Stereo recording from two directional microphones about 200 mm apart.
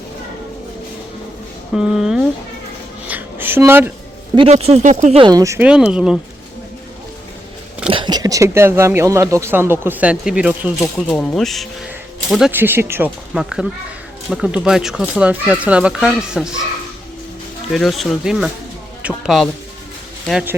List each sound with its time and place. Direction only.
1.7 s speech: centre (ahead or behind)
3.1 s a sound: 10° right (ahead or behind)
4.4 s speech: 30° right (ahead or behind)
5.2 s speech: 20° right (ahead or behind)
7.9 s speech: 25° right (ahead or behind); by 10.8 s 5° right (ahead or behind)
11.1 s speech: 5° left (ahead or behind)
17.7 s speech: centre (ahead or behind)